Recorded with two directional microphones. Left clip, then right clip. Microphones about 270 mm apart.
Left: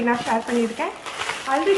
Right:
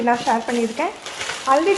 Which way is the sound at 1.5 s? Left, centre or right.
Centre.